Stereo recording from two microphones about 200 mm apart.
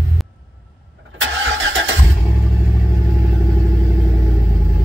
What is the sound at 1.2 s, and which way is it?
Vehicle, 70° right (ahead or behind).